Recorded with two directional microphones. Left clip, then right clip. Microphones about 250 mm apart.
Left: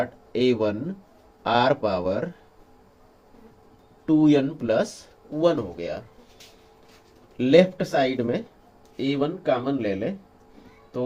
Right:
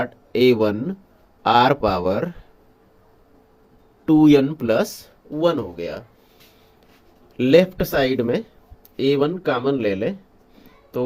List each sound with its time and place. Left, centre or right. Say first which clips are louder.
0.3 s speech: right 6 dB; right
4.0 s speech: right 5 dB; right
7.3 s speech: right 2 dB; right